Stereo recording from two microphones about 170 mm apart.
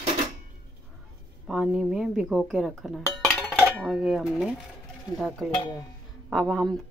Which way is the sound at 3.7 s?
5° right (ahead or behind).